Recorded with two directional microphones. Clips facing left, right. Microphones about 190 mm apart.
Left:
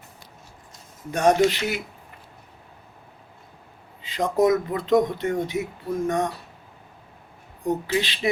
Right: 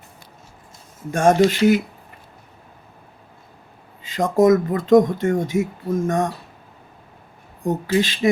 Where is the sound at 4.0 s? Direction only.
45° right (ahead or behind).